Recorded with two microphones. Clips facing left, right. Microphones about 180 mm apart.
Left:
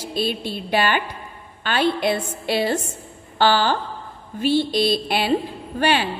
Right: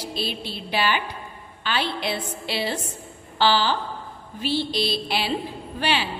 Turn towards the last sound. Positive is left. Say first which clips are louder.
# left 5 dB
turn(degrees=50)  # may be behind; listen again after turning